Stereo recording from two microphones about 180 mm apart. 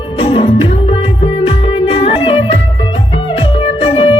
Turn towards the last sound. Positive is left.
turn(degrees=30)  # may be behind; listen again after turning